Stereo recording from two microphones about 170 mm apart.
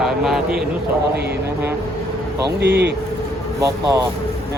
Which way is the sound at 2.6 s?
75° right (ahead or behind).